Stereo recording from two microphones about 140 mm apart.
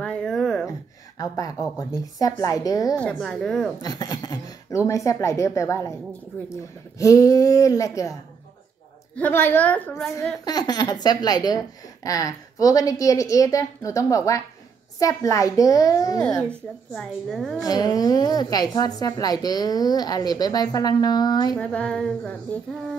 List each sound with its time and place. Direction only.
0.0 s a sound: 5° left (ahead or behind)
0.7 s a woman's voice: 25° left (ahead or behind)
3.0 s a woman's voice: 5° left (ahead or behind)
3.8 s speech: 25° left (ahead or behind)
7.0 s a woman's voice: 25° left (ahead or behind)
9.1 s child singing: 15° left (ahead or behind)
9.9 s a woman's voice: centre (ahead or behind)
10.4 s a woman's voice: 30° left (ahead or behind)
16.4 s a woman's voice: 5° left (ahead or behind)
17.6 s a woman's voice: 25° left (ahead or behind)
21.5 s child singing: 10° left (ahead or behind)